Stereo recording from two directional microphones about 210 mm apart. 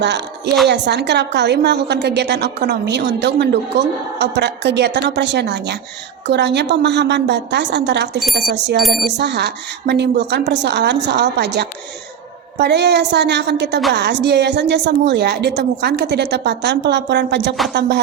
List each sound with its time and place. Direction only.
0.7 s a woman's voice: 55° right (ahead or behind)